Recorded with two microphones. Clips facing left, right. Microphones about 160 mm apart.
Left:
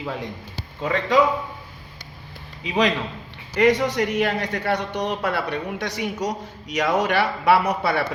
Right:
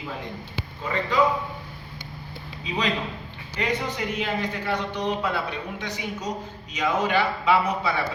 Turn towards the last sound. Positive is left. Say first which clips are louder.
# left 3 dB
turn(degrees=65)  # may be behind; listen again after turning